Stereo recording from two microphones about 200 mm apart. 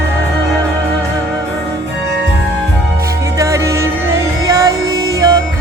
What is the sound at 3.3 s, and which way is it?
Music, 15° right (ahead or behind).